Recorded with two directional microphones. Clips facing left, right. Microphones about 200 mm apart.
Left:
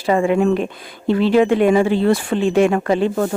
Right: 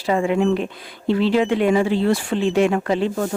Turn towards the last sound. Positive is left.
turn(degrees=55)  # may be behind; listen again after turning